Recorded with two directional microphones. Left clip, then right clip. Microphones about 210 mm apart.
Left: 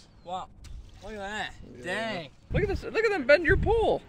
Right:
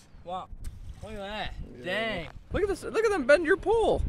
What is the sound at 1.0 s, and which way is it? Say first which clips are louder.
Speech: left 1 dB; 40° right (ahead or behind).